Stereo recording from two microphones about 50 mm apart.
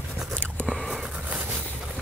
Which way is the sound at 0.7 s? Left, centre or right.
Centre.